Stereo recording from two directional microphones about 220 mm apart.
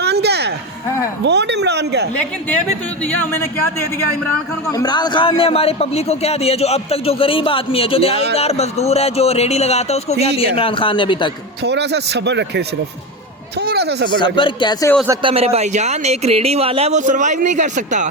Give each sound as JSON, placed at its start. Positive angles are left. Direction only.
{"t": 0.0, "sound": "a sound", "side_deg": -50}
{"t": 1.2, "sound": "speech", "side_deg": -50}
{"t": 3.0, "sound": "speech", "side_deg": 10}
{"t": 4.7, "sound": "a man's voice", "side_deg": 15}
{"t": 11.6, "sound": "speech", "side_deg": -50}
{"t": 14.3, "sound": "a man's voice", "side_deg": 20}
{"t": 15.0, "sound": "speech", "side_deg": -20}